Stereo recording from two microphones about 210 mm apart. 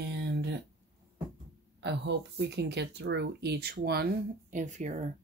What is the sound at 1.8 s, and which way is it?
Speech, 55° right (ahead or behind).